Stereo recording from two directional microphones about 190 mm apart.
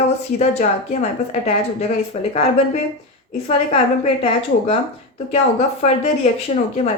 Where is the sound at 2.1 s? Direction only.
35° left (ahead or behind).